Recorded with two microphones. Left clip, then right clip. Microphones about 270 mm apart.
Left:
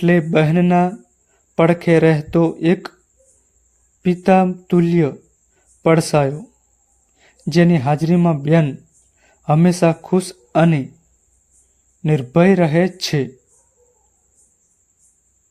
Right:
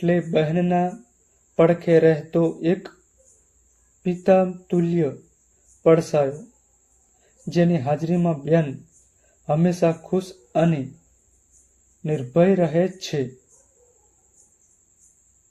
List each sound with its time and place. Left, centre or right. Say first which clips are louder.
0.0 s a man's voice: left 5 dB; left
4.0 s a man's voice: left 3 dB; left
7.4 s a man's voice: left 5 dB; left
12.0 s a man's voice: left 4 dB; left